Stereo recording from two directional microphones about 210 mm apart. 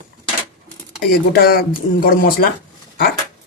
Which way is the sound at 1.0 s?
45° left (ahead or behind).